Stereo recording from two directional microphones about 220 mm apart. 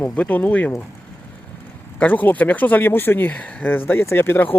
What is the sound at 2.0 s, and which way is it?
Speech, 10° left (ahead or behind).